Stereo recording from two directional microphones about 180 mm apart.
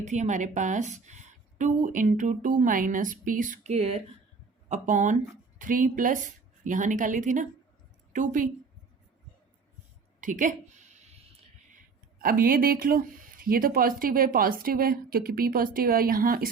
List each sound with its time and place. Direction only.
0.0 s a woman's voice: 40° right (ahead or behind)
10.2 s a sound: 45° right (ahead or behind)
12.2 s speech: 55° right (ahead or behind)